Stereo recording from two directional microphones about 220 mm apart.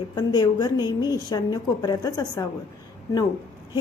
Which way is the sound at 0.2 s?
15° left (ahead or behind).